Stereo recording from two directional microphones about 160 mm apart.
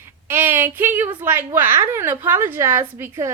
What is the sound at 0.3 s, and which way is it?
A woman's voice, 15° right (ahead or behind).